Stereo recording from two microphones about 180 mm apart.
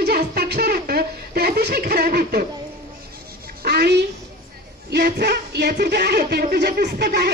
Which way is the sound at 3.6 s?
60° right (ahead or behind).